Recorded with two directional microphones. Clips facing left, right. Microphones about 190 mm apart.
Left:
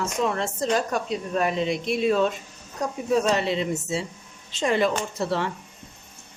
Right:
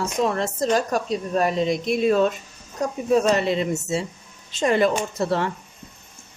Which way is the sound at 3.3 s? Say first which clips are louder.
Right 3 dB; 50° right (ahead or behind).